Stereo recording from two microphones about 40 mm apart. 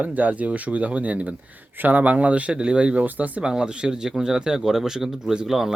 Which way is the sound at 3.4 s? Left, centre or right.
Right.